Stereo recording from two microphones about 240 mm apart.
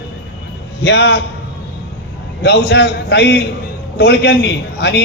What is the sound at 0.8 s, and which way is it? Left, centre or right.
Speech, left.